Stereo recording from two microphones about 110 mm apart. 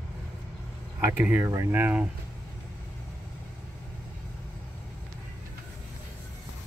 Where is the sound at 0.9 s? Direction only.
20° right (ahead or behind).